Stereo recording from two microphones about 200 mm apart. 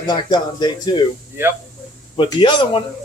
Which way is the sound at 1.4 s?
10° right (ahead or behind).